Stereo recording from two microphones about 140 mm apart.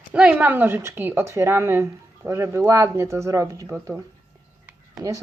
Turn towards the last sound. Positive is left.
turn(degrees=-25)  # may be behind; listen again after turning